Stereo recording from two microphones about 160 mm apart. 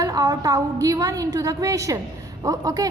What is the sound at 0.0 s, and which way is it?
A woman's voice, 20° right (ahead or behind).